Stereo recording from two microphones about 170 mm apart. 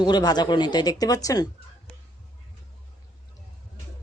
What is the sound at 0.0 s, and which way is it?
A woman's voice, 25° left (ahead or behind).